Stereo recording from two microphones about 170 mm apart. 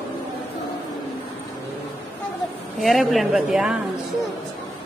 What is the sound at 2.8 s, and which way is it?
Speech, centre (ahead or behind).